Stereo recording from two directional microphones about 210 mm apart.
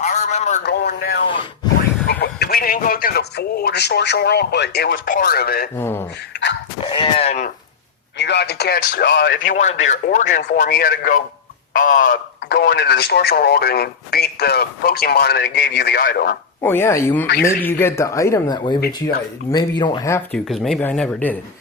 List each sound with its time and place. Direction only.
0.0 s a sound: 35° left (ahead or behind)
0.6 s a sound: 50° left (ahead or behind)
2.0 s speech: 50° left (ahead or behind)
5.7 s speech: 10° left (ahead or behind)
6.3 s dog: 55° left (ahead or behind)
6.7 s a sound: 25° left (ahead or behind)
8.2 s speech: 55° left (ahead or behind)
9.4 s a man's voice: 35° left (ahead or behind)
16.6 s speech: 10° left (ahead or behind)
20.5 s speech: centre (ahead or behind)